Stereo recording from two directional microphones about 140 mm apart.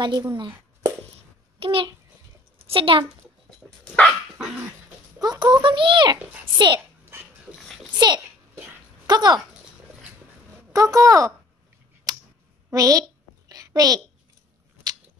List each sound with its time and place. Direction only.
0.0 s a woman's voice: 30° right (ahead or behind)
3.4 s dog: 10° left (ahead or behind)
5.2 s a child's voice: 30° right (ahead or behind)
7.5 s a sound: centre (ahead or behind)
7.9 s a sound: 30° right (ahead or behind)
9.0 s speech: 30° right (ahead or behind)
10.7 s speech: 25° right (ahead or behind)
12.7 s speech: 25° right (ahead or behind)
13.5 s a sound: 25° right (ahead or behind)